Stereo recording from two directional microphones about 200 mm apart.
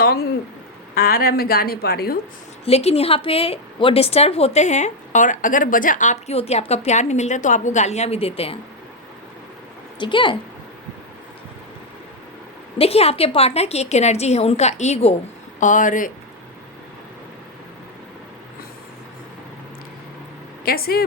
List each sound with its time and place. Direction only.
0.0 s a sound: 50° left (ahead or behind)
0.9 s a woman's voice: 50° left (ahead or behind)
2.6 s a woman's voice: 30° left (ahead or behind)
10.0 s speech: 25° left (ahead or behind)
12.8 s a woman's voice: 30° left (ahead or behind)
20.7 s a woman's voice: 50° left (ahead or behind)